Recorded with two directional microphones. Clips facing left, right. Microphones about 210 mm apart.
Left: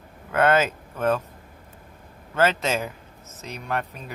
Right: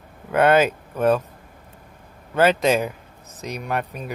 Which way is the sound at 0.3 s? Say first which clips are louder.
Right 4 dB; 15° right (ahead or behind).